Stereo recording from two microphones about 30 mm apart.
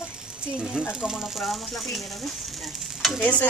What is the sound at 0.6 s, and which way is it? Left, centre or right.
Speech, right.